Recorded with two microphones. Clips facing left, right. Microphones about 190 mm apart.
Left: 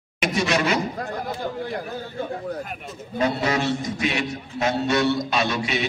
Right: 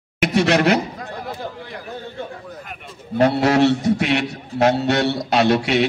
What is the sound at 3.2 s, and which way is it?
A man's voice, 70° right (ahead or behind).